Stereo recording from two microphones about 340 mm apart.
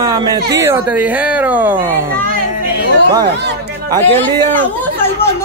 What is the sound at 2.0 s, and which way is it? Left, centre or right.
Speech, right.